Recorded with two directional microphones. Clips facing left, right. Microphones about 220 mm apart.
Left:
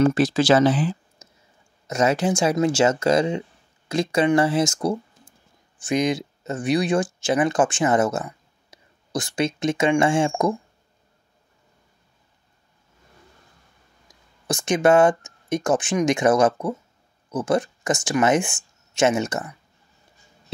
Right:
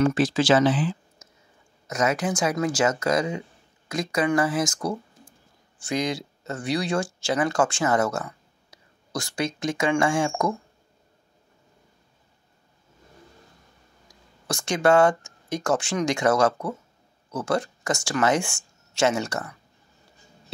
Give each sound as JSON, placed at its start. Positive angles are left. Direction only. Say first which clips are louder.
{"t": 0.0, "sound": "speech", "louder": "left 3 dB", "side_deg": 40}
{"t": 1.2, "sound": "whispering", "louder": "left 2 dB", "side_deg": 30}
{"t": 1.9, "sound": "speech", "louder": "left 4 dB", "side_deg": 30}
{"t": 14.0, "sound": "speech", "louder": "left 4 dB", "side_deg": 20}